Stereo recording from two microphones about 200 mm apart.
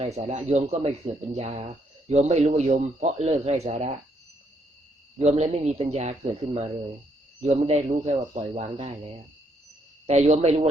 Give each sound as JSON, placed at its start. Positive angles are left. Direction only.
{"t": 0.0, "sound": "speech", "side_deg": -35}
{"t": 5.2, "sound": "speech", "side_deg": -35}
{"t": 10.1, "sound": "speech", "side_deg": -35}